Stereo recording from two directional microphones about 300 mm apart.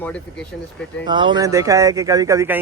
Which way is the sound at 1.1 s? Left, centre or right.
Centre.